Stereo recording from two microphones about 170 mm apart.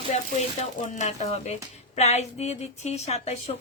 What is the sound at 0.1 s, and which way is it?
Speech, 40° left (ahead or behind).